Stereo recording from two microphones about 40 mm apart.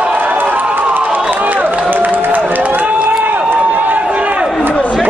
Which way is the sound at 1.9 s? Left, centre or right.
Right.